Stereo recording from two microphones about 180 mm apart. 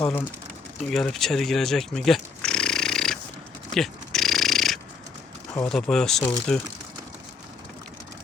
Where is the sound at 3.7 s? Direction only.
Centre (ahead or behind).